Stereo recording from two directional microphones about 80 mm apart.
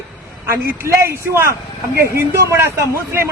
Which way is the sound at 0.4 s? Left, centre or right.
Right.